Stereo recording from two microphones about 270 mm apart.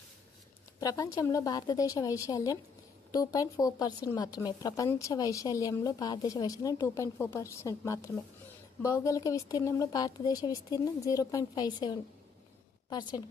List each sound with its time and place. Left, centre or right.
0.8 s speech: centre